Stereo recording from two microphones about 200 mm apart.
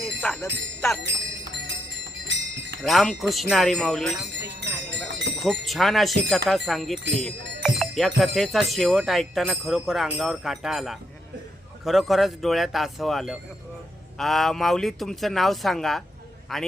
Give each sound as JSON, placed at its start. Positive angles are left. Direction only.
{"t": 0.2, "sound": "jingle bell", "side_deg": 0}
{"t": 1.0, "sound": "music", "side_deg": -60}
{"t": 2.2, "sound": "jingle bell", "side_deg": -60}
{"t": 2.8, "sound": "speech", "side_deg": 0}
{"t": 5.4, "sound": "speech", "side_deg": 0}
{"t": 7.8, "sound": "music", "side_deg": 0}
{"t": 8.2, "sound": "speech", "side_deg": 0}